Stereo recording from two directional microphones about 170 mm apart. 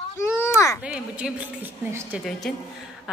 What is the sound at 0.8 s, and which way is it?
A woman's voice, 5° right (ahead or behind).